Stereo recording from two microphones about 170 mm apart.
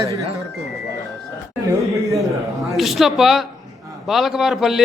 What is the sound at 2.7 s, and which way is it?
A man's voice, centre (ahead or behind).